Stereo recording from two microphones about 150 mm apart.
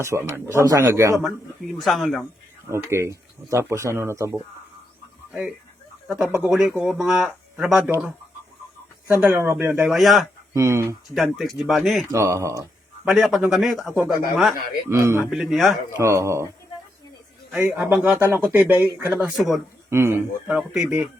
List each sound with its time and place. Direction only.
0.0 s a man's voice: 20° right (ahead or behind)
1.2 s a man's voice: centre (ahead or behind)
2.6 s speech: 15° right (ahead or behind)
6.1 s a man's voice: 5° right (ahead or behind)
9.0 s speech: 15° right (ahead or behind)
10.5 s a man's voice: 20° right (ahead or behind)
11.1 s a man's voice: centre (ahead or behind)
12.1 s a man's voice: 20° right (ahead or behind)
13.1 s a man's voice: 5° right (ahead or behind)
14.8 s a man's voice: 20° right (ahead or behind)
15.3 s a man's voice: centre (ahead or behind)
16.0 s a man's voice: 20° right (ahead or behind)
17.5 s a man's voice: 5° right (ahead or behind)
19.9 s speech: 15° right (ahead or behind)